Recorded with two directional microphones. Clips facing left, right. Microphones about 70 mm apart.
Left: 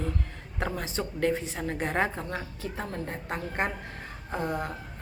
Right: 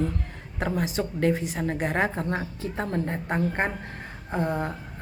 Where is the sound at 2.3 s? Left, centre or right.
Right.